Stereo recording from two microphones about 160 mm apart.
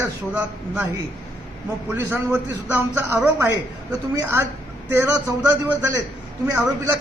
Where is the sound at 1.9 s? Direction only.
15° right (ahead or behind).